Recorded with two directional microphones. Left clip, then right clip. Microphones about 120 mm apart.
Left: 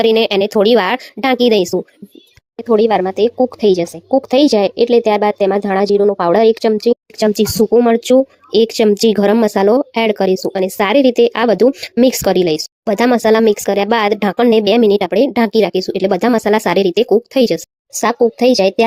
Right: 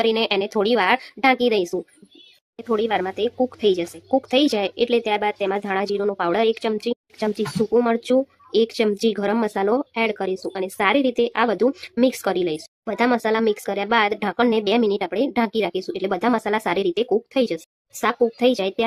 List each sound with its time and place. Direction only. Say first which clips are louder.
0.0 s speech: left 8 dB; 30° left (ahead or behind)
18.3 s speech: left 9 dB; 30° left (ahead or behind)